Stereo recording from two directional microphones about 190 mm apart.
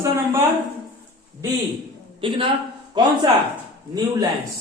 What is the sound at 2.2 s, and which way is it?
Speech, 25° right (ahead or behind).